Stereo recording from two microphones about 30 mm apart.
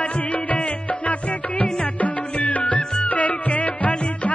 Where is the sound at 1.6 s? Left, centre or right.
Left.